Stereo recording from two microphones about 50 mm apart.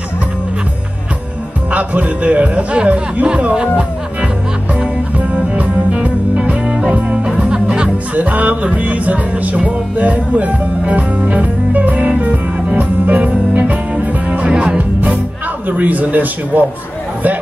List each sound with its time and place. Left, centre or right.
1.7 s music: right
5.6 s music: centre
7.3 s music: centre
8.1 s music: right
15.7 s a man's voice: right